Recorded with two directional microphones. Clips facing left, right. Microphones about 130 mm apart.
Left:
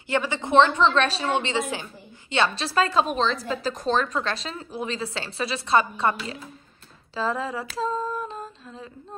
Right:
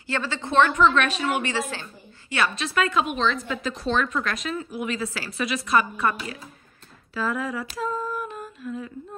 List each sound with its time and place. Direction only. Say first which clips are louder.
0.1 s a woman's voice: left 3 dB; 20° left (ahead or behind)
2.3 s a woman's voice: left 2 dB; 30° left (ahead or behind)
7.2 s humming: even; 25° left (ahead or behind)